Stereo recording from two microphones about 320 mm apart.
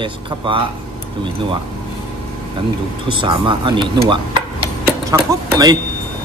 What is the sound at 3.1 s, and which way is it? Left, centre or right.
Speech, centre.